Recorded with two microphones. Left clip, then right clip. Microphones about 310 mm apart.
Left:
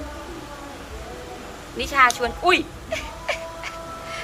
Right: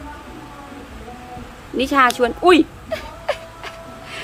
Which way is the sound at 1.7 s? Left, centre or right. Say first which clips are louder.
Right 3 dB; right.